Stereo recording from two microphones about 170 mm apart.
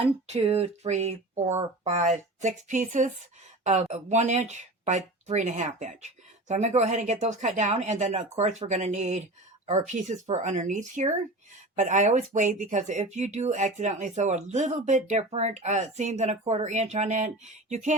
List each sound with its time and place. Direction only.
0.0 s speech: 35° right (ahead or behind)